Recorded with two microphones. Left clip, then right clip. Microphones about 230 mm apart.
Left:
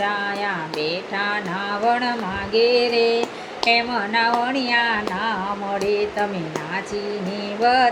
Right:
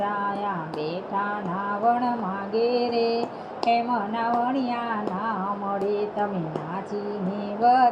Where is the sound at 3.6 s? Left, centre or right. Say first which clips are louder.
Left 4 dB; centre.